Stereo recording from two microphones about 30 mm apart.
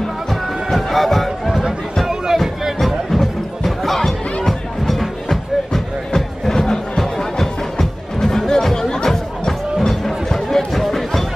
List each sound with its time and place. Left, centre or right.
0.3 s music: centre
2.3 s music: centre
3.1 s music: centre